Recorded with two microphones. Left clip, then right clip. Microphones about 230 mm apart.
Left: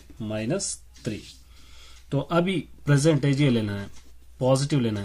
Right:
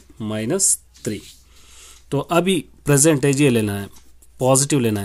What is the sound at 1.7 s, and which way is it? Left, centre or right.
Speech, right.